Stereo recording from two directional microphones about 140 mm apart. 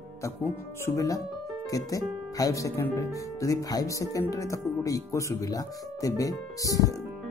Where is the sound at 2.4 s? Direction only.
25° left (ahead or behind).